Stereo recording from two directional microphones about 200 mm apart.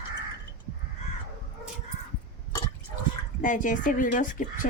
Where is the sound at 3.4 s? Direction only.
40° left (ahead or behind).